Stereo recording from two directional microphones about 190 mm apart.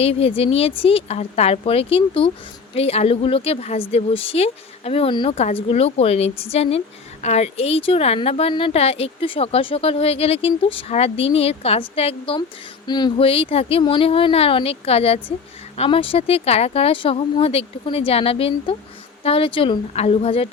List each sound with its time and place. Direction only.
0.0 s a woman's voice: 30° left (ahead or behind)